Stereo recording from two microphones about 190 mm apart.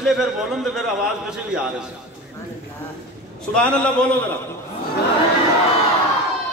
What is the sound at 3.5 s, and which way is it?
Speech, 5° left (ahead or behind).